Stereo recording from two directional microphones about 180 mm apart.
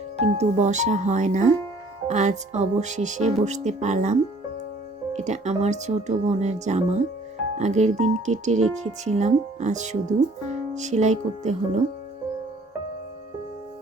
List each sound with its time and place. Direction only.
0.3 s speech: 40° right (ahead or behind)
5.1 s speech: 40° right (ahead or behind)